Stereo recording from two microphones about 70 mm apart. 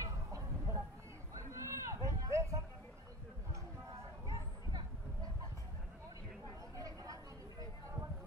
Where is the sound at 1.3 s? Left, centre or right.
Right.